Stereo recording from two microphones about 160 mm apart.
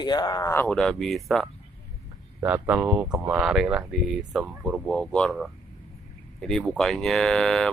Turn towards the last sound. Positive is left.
turn(degrees=5)  # may be behind; listen again after turning